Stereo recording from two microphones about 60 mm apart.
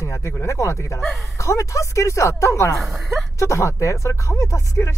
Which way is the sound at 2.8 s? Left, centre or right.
Centre.